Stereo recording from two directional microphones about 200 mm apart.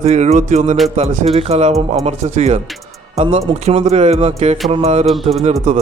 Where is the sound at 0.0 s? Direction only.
35° right (ahead or behind).